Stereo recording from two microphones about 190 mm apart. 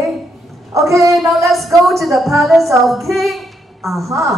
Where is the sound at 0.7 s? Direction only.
15° right (ahead or behind).